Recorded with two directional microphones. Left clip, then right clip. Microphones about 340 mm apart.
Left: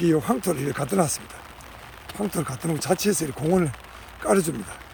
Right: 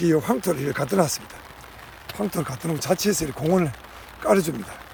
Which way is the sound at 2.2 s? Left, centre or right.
Centre.